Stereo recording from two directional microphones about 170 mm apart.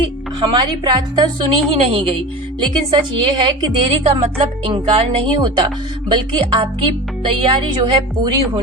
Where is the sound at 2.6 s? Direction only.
30° right (ahead or behind).